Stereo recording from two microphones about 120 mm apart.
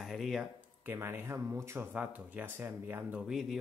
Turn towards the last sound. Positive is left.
turn(degrees=0)  # may be behind; listen again after turning